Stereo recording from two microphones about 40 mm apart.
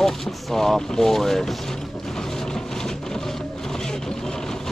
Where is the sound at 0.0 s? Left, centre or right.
Centre.